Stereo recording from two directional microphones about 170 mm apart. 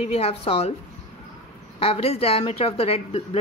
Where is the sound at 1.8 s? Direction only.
35° left (ahead or behind).